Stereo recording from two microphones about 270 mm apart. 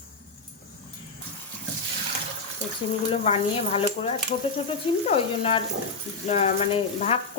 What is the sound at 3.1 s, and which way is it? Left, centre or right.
Speech, left.